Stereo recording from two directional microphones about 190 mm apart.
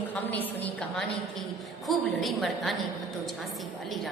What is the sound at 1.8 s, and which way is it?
Speech, centre (ahead or behind).